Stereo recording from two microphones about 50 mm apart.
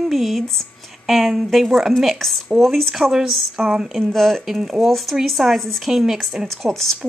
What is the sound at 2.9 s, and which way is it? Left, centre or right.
Speech, centre.